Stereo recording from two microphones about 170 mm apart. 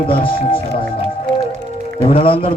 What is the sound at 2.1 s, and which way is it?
Speech, 30° left (ahead or behind).